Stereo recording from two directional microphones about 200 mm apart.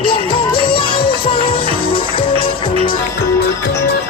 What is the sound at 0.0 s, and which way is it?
Music, 25° left (ahead or behind).